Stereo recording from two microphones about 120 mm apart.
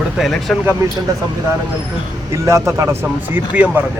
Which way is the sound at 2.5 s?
25° right (ahead or behind).